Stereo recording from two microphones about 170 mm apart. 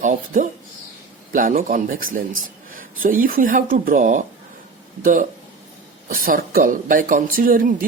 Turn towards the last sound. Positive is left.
turn(degrees=-55)  # may be behind; listen again after turning